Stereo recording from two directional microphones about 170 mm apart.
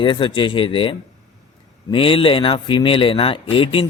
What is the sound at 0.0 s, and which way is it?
Speech, 30° left (ahead or behind).